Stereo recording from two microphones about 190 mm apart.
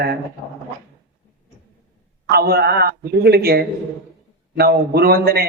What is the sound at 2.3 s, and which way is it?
A man's voice, 55° right (ahead or behind).